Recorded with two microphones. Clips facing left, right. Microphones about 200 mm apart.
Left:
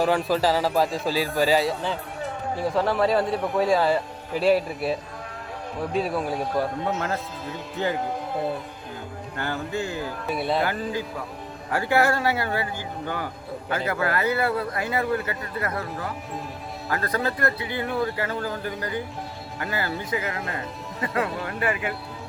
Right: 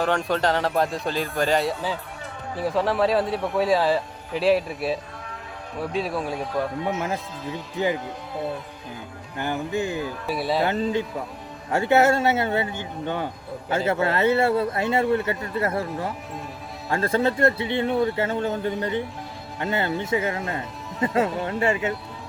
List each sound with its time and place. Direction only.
0.0 s speech: 5° left (ahead or behind)
6.8 s speech: 15° right (ahead or behind)
9.4 s speech: 15° right (ahead or behind)
10.2 s speech: centre (ahead or behind)
10.6 s a man's voice: 25° right (ahead or behind)